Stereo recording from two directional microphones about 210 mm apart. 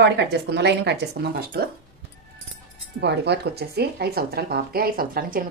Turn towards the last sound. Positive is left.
turn(degrees=-45)  # may be behind; listen again after turning